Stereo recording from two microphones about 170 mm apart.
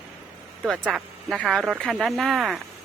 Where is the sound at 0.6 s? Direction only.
Centre (ahead or behind).